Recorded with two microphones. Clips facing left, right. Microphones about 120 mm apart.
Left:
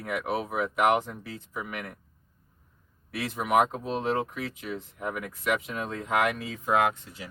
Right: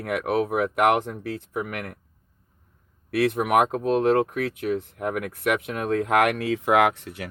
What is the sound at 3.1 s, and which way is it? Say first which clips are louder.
Speech: right 5 dB; 60° right (ahead or behind).